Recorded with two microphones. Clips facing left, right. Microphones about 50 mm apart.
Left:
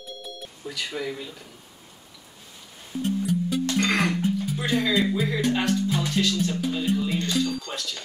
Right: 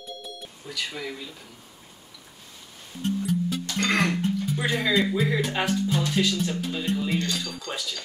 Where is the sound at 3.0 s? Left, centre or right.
Centre.